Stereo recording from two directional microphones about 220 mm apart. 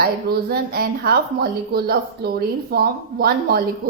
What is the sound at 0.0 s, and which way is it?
A woman's voice, 45° right (ahead or behind).